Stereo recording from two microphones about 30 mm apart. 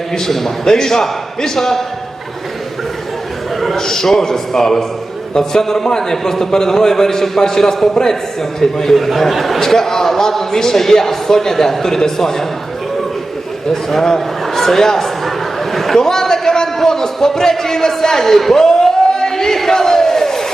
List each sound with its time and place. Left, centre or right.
0.1 s a man's voice: centre
3.8 s a man's voice: centre
9.0 s speech: centre
9.6 s a man's voice: centre
13.9 s a man's voice: centre
15.7 s a sound: centre
16.0 s a man's voice: centre
18.6 s crowd: centre